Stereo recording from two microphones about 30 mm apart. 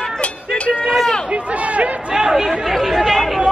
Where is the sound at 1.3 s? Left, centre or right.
Right.